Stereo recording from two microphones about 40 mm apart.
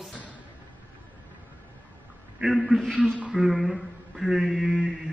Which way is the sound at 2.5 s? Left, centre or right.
Centre.